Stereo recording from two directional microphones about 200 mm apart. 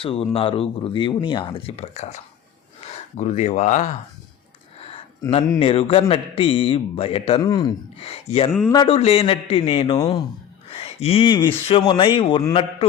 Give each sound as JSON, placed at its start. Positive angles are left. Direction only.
{"t": 0.0, "sound": "speech", "side_deg": 30}
{"t": 5.2, "sound": "speech", "side_deg": 20}